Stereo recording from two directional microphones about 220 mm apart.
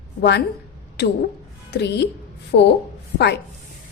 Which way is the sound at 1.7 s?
50° left (ahead or behind).